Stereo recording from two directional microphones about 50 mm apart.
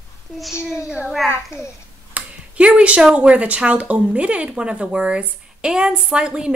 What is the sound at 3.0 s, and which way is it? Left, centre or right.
Speech, centre.